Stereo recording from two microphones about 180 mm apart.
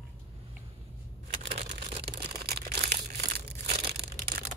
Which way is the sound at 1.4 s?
35° right (ahead or behind).